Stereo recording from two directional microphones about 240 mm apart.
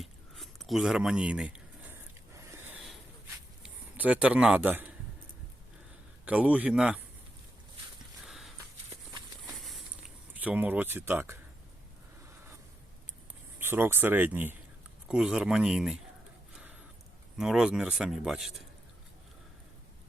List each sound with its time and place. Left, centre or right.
0.0 s a sound: centre
3.6 s a man's voice: centre
6.2 s speech: centre
8.2 s a sound: centre
9.5 s crumpling: centre
10.4 s speech: centre
13.6 s speech: centre
17.3 s speech: centre